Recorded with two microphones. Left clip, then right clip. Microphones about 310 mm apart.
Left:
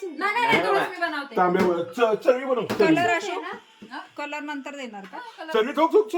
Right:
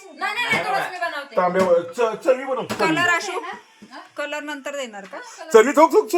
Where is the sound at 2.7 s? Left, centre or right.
Centre.